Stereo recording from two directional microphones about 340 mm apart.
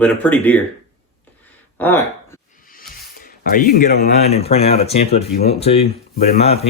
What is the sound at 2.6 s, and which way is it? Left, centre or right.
Speech, left.